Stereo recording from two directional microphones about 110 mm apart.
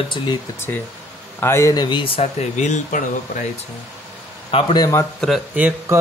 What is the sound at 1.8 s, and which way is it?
Speech, 50° left (ahead or behind).